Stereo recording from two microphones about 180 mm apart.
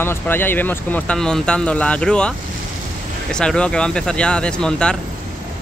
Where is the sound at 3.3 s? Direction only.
5° left (ahead or behind).